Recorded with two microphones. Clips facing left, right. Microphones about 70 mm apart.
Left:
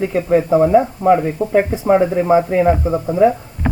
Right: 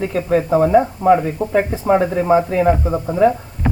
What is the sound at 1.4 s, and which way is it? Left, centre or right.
Speech, left.